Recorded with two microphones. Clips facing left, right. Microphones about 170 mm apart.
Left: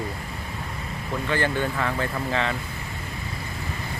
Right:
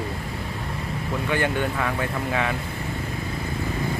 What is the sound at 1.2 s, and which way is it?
Speech, 15° right (ahead or behind).